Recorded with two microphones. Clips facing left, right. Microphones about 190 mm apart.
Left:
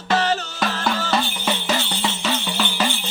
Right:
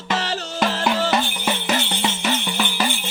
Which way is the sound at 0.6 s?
25° right (ahead or behind).